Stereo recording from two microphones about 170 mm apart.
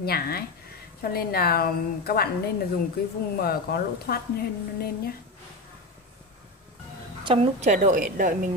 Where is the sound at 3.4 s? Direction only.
65° left (ahead or behind).